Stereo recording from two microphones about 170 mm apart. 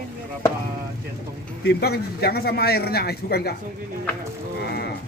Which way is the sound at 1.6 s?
70° left (ahead or behind).